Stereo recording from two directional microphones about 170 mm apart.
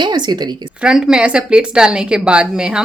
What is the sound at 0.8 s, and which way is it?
A woman's voice, 5° right (ahead or behind).